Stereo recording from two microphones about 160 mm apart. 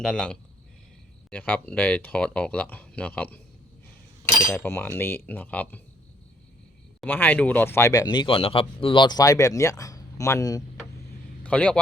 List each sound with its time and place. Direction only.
0.0 s speech: 5° left (ahead or behind)
4.5 s speech: 15° left (ahead or behind)
7.0 s speech: 10° left (ahead or behind)
11.4 s a man's voice: 5° left (ahead or behind)